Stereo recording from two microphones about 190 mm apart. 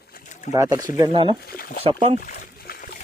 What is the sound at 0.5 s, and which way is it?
Speech, 20° right (ahead or behind).